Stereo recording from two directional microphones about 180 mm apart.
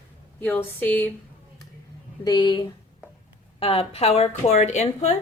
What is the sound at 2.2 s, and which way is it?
A woman's voice, 25° left (ahead or behind).